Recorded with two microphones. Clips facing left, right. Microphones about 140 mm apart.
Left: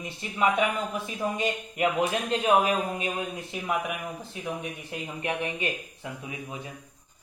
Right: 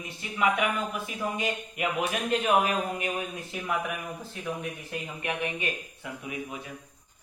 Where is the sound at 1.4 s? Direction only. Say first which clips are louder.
Left 4 dB; 30° left (ahead or behind).